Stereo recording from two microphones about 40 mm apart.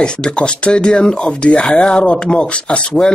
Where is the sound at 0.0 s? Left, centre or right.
Left.